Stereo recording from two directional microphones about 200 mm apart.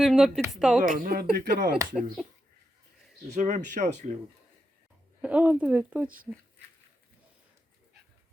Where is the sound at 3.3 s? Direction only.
40° right (ahead or behind).